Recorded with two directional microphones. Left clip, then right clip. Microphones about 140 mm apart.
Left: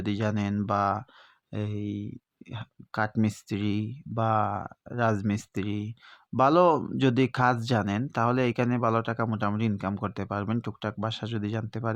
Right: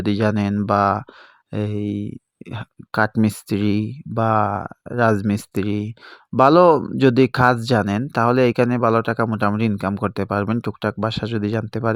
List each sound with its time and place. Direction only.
0.0 s speech: 60° right (ahead or behind)